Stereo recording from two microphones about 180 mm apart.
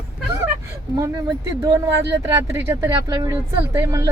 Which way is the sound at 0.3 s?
15° right (ahead or behind).